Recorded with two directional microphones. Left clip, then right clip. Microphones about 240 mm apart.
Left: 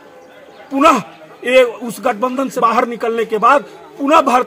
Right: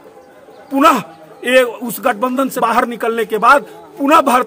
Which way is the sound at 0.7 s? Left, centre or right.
Centre.